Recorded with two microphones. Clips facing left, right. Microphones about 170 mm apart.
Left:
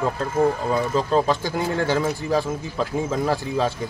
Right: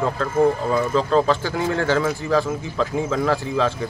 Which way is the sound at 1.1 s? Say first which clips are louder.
Right 1 dB; 10° left (ahead or behind).